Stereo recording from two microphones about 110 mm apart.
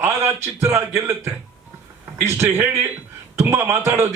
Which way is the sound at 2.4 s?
20° right (ahead or behind).